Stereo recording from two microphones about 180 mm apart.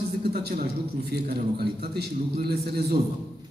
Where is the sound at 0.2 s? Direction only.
60° right (ahead or behind).